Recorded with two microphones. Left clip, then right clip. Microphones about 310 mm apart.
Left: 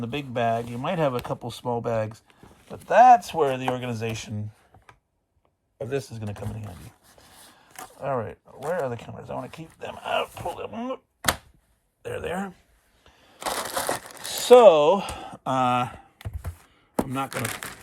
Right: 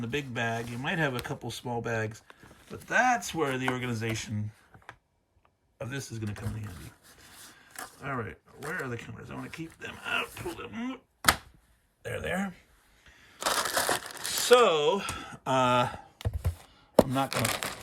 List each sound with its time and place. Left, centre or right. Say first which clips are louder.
0.0 s speech: left 6 dB; centre
5.7 s a sound: left 8 dB; centre
7.9 s speech: left 8 dB; centre
12.0 s speech: left 3 dB; centre
13.1 s crumpling: even; centre
15.7 s a sound: left 1 dB; centre
17.1 s chopping: even; centre